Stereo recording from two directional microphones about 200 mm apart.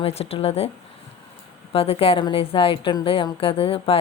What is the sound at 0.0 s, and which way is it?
Speech, 30° left (ahead or behind).